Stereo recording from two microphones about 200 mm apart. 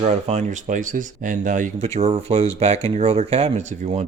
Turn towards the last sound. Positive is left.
turn(degrees=-35)  # may be behind; listen again after turning